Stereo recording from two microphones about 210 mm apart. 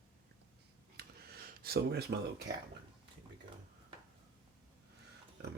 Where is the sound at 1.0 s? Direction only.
45° right (ahead or behind).